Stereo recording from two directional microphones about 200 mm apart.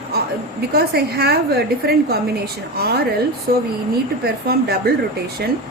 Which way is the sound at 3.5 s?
50° right (ahead or behind).